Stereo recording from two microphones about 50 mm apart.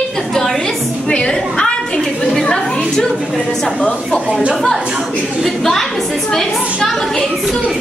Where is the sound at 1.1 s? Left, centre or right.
Left.